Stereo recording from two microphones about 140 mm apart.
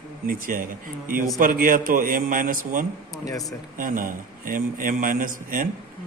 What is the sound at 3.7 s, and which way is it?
A man's voice, 75° right (ahead or behind).